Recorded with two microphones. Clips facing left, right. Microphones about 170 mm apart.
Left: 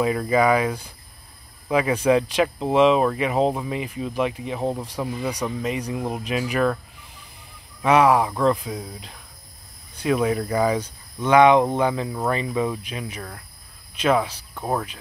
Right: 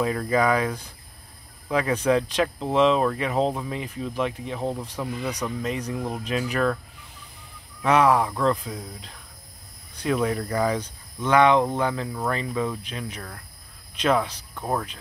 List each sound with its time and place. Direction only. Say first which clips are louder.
0.0 s speech: left 3 dB; 10° left (ahead or behind)
7.8 s speech: left 2 dB; 10° left (ahead or behind)